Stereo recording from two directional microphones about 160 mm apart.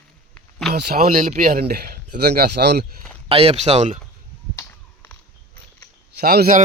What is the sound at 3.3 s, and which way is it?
Speech, 40° right (ahead or behind).